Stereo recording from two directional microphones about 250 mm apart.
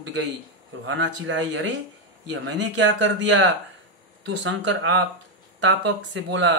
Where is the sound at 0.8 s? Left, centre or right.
Right.